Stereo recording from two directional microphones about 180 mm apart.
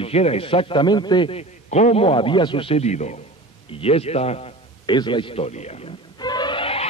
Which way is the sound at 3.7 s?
35° left (ahead or behind).